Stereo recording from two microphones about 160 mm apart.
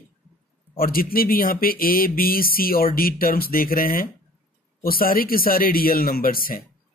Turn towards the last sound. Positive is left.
turn(degrees=65)  # may be behind; listen again after turning